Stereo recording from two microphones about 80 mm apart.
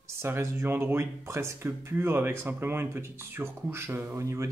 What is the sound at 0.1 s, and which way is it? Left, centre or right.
Speech, right.